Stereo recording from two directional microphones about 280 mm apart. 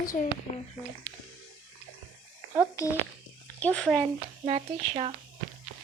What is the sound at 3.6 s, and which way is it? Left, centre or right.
Speech, centre.